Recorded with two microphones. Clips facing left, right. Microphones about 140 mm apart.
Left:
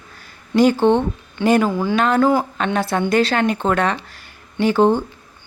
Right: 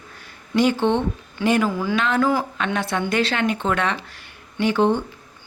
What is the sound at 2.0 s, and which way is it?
A woman's voice, 40° left (ahead or behind).